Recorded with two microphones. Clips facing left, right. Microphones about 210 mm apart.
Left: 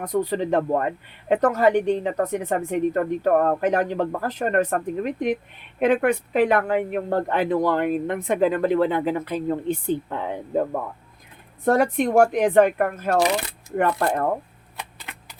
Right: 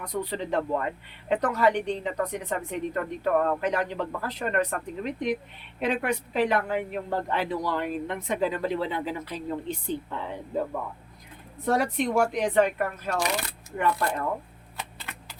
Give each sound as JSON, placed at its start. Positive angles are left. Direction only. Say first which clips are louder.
{"t": 0.0, "sound": "speech", "louder": "left 8 dB", "side_deg": 45}